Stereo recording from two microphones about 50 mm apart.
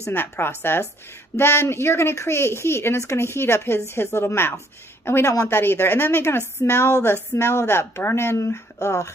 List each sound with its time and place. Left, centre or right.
0.1 s a woman's voice: left